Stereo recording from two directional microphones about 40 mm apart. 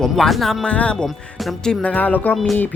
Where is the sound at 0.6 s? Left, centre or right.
Left.